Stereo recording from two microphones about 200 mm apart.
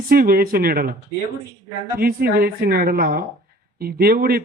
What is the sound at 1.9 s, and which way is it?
A man's voice, 50° right (ahead or behind).